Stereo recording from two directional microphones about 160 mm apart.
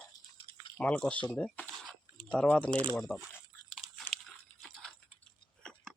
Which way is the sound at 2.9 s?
Centre (ahead or behind).